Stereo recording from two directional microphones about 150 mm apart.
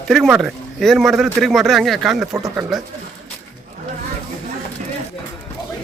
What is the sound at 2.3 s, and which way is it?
Speech, 20° right (ahead or behind).